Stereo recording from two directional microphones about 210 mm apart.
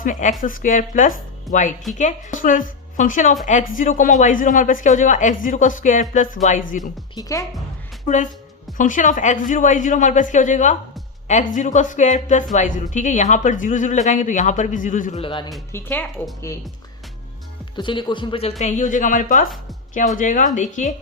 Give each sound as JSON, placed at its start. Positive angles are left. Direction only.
{"t": 0.0, "sound": "speech", "side_deg": 40}
{"t": 7.2, "sound": "speech", "side_deg": 15}
{"t": 8.0, "sound": "a woman's voice", "side_deg": 35}
{"t": 15.2, "sound": "speech", "side_deg": 25}
{"t": 15.7, "sound": "speech", "side_deg": 10}
{"t": 17.7, "sound": "speech", "side_deg": 20}
{"t": 18.6, "sound": "speech", "side_deg": 40}